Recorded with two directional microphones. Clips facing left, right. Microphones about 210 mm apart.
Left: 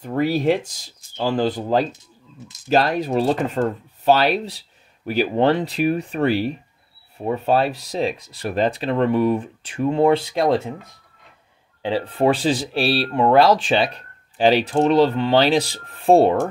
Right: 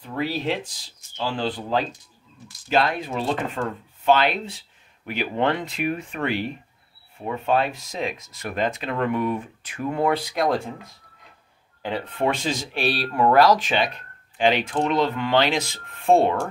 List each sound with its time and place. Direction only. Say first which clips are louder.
0.0 s speech: left 7 dB; 45° left (ahead or behind); by 10.7 s 25° left (ahead or behind)
11.8 s speech: left 5 dB; 30° left (ahead or behind)